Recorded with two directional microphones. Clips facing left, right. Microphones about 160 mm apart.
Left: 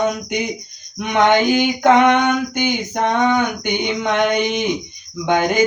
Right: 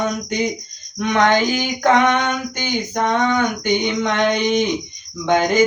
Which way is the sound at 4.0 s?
15° left (ahead or behind).